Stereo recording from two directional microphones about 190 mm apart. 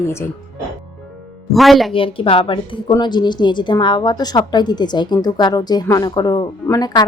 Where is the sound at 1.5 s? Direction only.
Centre (ahead or behind).